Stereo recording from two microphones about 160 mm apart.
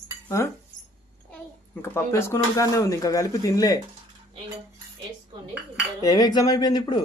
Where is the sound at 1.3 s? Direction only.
15° left (ahead or behind).